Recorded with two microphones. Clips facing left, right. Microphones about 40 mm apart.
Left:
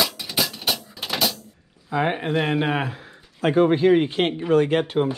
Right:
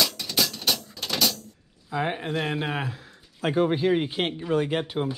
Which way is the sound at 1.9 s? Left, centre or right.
Left.